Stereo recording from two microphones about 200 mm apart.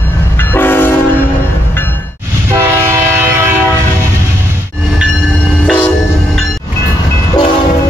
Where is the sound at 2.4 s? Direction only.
10° right (ahead or behind).